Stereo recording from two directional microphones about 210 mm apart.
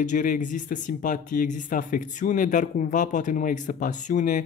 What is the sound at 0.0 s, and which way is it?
Speech, 40° left (ahead or behind).